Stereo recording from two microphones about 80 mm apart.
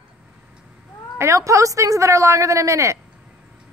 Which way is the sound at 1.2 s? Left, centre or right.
Right.